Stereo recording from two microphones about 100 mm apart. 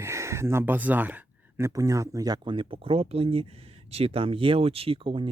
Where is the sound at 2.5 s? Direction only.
60° right (ahead or behind).